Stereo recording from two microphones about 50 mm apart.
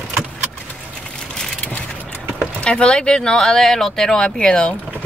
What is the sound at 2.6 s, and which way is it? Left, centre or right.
Speech, centre.